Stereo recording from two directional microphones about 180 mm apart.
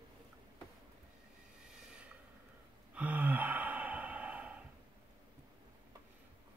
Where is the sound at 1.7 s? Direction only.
5° right (ahead or behind).